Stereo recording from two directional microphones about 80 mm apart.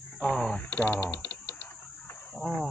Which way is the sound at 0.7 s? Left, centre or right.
Left.